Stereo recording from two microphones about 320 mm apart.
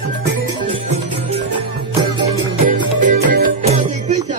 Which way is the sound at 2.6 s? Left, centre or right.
Right.